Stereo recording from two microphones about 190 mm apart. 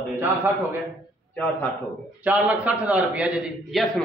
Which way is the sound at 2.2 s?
5° right (ahead or behind).